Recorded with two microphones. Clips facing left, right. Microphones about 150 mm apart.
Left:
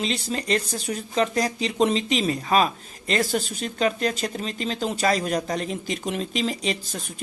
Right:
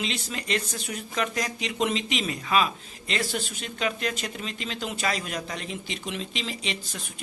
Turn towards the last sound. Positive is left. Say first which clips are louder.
# left 6 dB
turn(degrees=40)  # may be behind; listen again after turning